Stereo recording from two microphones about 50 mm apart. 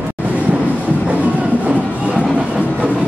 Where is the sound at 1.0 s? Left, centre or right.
Right.